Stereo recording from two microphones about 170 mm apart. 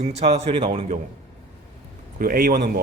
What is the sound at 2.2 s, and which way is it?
Speech, 60° right (ahead or behind).